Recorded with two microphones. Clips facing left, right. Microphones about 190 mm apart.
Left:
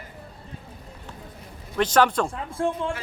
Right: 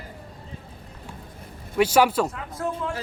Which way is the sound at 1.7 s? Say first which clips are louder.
Right 1 dB; 10° right (ahead or behind).